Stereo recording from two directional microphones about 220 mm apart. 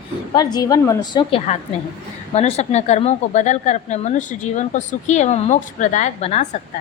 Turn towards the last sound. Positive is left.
turn(degrees=30)  # may be behind; listen again after turning